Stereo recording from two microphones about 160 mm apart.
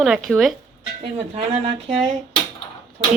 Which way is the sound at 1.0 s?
35° right (ahead or behind).